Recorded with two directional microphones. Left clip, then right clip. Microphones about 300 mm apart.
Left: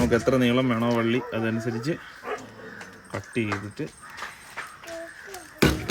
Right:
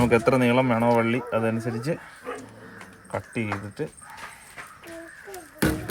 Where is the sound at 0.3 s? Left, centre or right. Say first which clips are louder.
Right 2 dB; right.